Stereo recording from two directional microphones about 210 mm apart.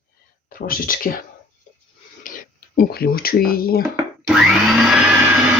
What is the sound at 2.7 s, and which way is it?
Speech, 45° left (ahead or behind).